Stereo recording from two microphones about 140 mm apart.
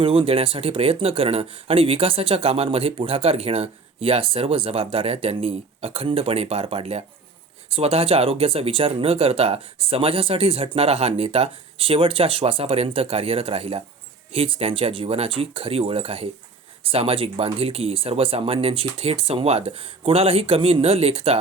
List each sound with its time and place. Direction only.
0.0 s speech: 40° right (ahead or behind)